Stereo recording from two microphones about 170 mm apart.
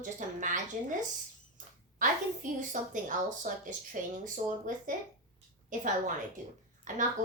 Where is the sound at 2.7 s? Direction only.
50° right (ahead or behind).